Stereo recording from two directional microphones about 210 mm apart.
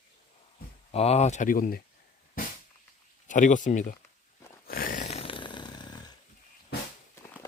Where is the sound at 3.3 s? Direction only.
35° left (ahead or behind).